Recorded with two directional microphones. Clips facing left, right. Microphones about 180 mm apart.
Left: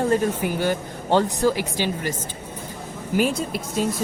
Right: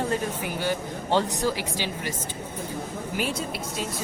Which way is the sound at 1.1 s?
50° left (ahead or behind).